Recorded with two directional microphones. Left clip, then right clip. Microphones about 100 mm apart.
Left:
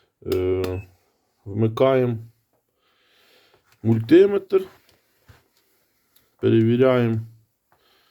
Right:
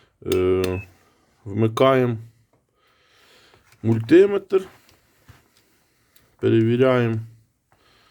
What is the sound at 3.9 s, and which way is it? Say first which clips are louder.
Speech: even; 20° right (ahead or behind).